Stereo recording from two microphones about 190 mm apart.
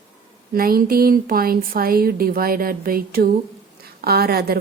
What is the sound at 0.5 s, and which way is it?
A woman's voice, 50° right (ahead or behind).